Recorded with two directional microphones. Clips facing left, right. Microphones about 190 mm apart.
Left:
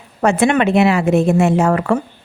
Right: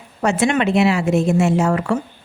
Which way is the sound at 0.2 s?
55° left (ahead or behind).